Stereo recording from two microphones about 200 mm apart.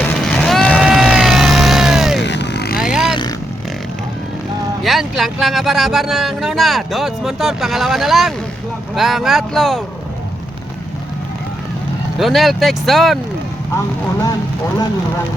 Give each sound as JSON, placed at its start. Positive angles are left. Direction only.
{"t": 0.0, "sound": "a sound", "side_deg": 5}
{"t": 2.2, "sound": "vehicle", "side_deg": 60}
{"t": 2.9, "sound": "vehicle", "side_deg": -5}
{"t": 4.8, "sound": "speech", "side_deg": 0}
{"t": 12.2, "sound": "speech", "side_deg": 0}